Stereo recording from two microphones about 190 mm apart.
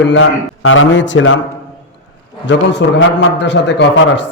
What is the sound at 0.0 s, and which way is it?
A man's voice, 85° left.